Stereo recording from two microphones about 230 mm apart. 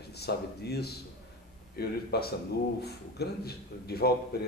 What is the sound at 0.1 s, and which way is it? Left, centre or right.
A man's voice, left.